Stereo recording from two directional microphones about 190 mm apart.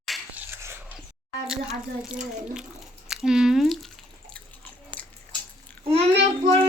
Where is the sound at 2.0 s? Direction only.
5° right (ahead or behind).